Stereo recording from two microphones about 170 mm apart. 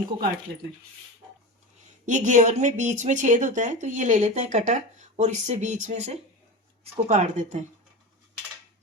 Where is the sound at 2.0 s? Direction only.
45° right (ahead or behind).